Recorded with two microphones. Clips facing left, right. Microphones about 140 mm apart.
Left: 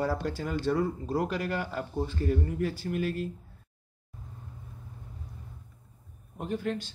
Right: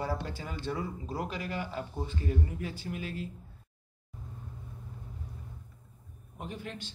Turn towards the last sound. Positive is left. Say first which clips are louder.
# left 9 dB
turn(degrees=50)  # may be behind; listen again after turning